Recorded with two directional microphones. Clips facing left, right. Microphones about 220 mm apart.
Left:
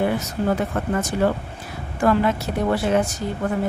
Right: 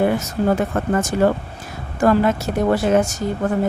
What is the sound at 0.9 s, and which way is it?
Speech, 45° right (ahead or behind).